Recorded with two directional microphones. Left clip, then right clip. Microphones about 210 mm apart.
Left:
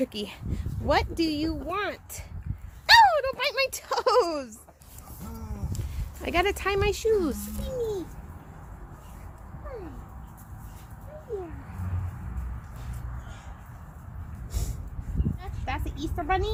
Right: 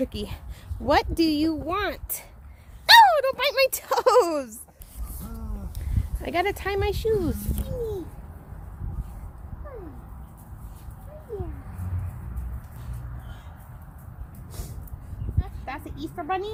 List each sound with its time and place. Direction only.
0.0 s speech: 15° right (ahead or behind)
0.5 s speech: 45° right (ahead or behind)
6.2 s speech: centre (ahead or behind)
15.4 s a sound: 10° right (ahead or behind)